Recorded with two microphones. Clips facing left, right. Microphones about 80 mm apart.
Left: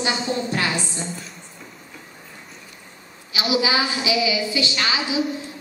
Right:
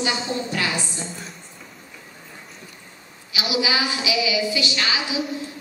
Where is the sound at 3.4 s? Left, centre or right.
Left.